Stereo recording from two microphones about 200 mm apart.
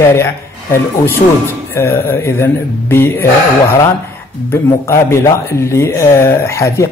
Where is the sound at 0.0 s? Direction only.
15° left (ahead or behind).